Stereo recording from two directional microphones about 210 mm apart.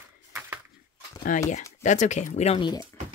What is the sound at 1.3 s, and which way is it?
Speech, 40° left (ahead or behind).